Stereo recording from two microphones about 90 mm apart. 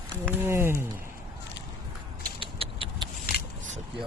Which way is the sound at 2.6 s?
90° right.